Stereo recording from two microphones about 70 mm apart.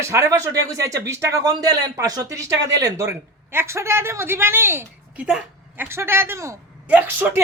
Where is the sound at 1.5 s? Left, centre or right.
Right.